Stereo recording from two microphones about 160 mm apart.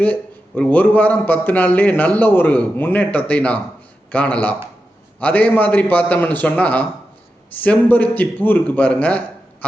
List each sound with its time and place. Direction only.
0.0 s a man's voice: 10° left (ahead or behind)